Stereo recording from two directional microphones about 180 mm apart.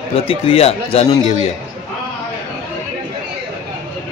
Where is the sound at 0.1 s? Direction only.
30° left (ahead or behind).